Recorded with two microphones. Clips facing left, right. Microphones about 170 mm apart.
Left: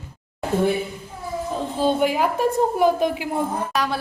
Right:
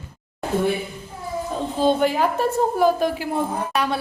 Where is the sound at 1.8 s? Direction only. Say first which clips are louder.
Right 1 dB; 10° left (ahead or behind).